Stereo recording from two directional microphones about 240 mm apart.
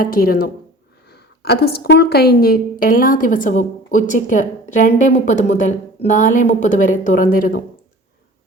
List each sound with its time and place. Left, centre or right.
0.0 s a woman's voice: left